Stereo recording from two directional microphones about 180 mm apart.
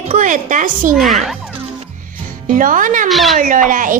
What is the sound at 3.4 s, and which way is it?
Speech, 50° right (ahead or behind).